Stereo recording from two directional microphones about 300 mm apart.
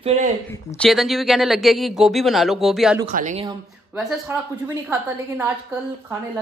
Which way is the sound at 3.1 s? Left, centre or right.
Right.